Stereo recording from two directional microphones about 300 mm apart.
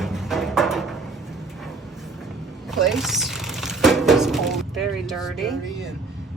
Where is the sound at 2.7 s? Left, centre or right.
Centre.